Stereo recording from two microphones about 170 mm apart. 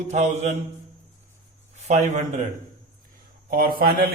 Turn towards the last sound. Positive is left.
turn(degrees=-60)  # may be behind; listen again after turning